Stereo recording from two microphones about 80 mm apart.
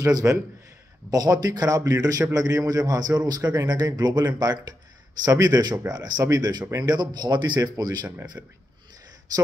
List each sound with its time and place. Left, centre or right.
0.2 s speech: right
1.1 s a man's voice: right
8.4 s speech: right